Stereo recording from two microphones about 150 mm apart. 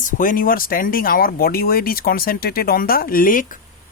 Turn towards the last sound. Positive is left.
turn(degrees=65)  # may be behind; listen again after turning